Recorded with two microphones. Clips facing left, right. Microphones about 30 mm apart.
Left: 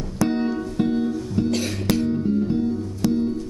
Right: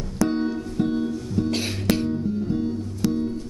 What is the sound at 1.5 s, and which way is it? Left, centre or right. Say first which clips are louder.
Music: left 1 dB; right.